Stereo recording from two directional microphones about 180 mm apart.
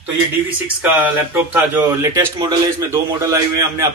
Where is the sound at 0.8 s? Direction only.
10° right (ahead or behind).